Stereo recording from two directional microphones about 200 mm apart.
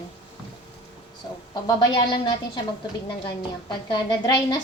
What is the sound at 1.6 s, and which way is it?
Speech, 20° left (ahead or behind).